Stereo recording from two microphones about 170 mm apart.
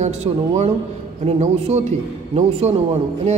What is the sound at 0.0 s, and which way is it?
A man's voice, 40° right (ahead or behind).